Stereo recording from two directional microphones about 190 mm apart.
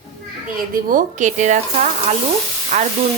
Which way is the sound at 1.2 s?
40° right (ahead or behind).